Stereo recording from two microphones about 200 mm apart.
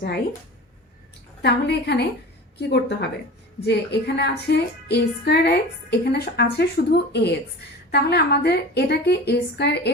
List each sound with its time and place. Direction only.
1.4 s a woman's voice: 55° left (ahead or behind)